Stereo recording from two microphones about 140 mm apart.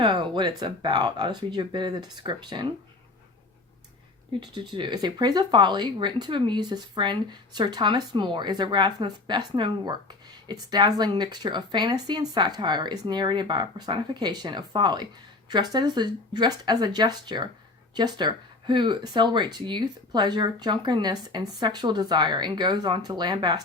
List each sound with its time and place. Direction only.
0.0 s speech: 35° right (ahead or behind)
4.4 s speech: 30° right (ahead or behind)